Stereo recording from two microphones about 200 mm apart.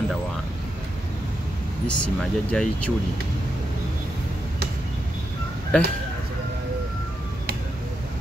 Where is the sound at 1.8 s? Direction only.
5° left (ahead or behind).